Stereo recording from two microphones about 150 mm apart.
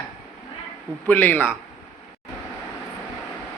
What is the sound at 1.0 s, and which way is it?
Speech, 10° left (ahead or behind).